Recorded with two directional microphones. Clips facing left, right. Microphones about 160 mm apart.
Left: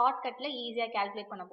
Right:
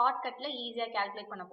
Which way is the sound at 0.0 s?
10° left (ahead or behind).